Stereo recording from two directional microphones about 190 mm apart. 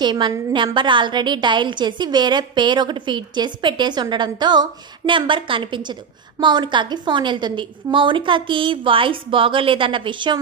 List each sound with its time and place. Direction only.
0.0 s a woman's voice: 25° right (ahead or behind)